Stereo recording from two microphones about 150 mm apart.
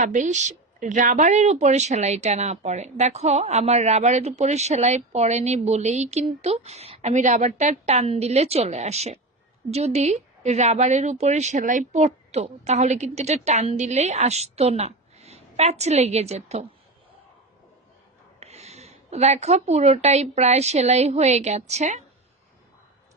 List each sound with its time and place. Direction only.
0.0 s a woman's voice: 55° right (ahead or behind)
18.3 s a woman's voice: 45° right (ahead or behind)